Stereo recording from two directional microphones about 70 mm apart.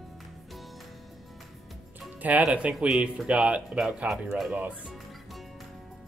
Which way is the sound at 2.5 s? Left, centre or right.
Centre.